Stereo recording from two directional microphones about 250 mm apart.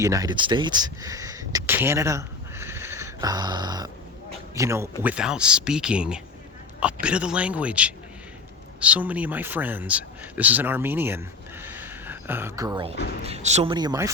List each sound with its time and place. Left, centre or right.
0.0 s speech: centre